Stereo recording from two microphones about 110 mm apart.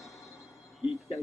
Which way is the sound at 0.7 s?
Centre (ahead or behind).